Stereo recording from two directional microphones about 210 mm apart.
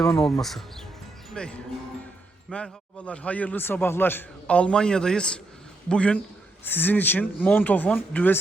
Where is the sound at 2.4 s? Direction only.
5° left (ahead or behind).